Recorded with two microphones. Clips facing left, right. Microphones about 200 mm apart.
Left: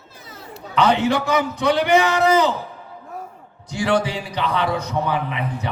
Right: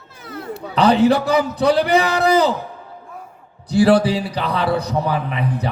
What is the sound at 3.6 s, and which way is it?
A man's voice, 35° right (ahead or behind).